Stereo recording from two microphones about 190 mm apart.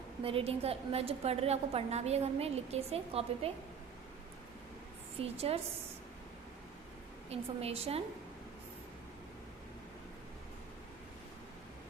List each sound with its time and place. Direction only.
0.2 s a woman's voice: 30° right (ahead or behind)
5.2 s a woman's voice: 30° right (ahead or behind)
7.3 s a woman's voice: 30° right (ahead or behind)